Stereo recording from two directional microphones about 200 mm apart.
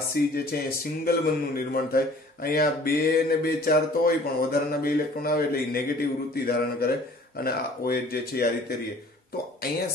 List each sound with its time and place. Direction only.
0.2 s speech: 50° left (ahead or behind)